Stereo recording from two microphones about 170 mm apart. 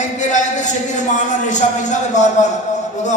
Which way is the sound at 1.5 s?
45° left (ahead or behind).